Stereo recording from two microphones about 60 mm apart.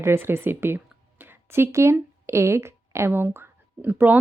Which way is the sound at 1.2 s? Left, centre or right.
Right.